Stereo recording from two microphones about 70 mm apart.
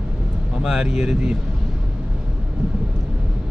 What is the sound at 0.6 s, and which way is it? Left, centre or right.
Speech, centre.